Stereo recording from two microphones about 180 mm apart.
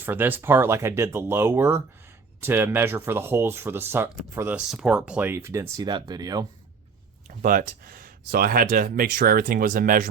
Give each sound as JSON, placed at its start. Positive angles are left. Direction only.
{"t": 0.0, "sound": "speech", "side_deg": -10}
{"t": 7.3, "sound": "speech", "side_deg": -50}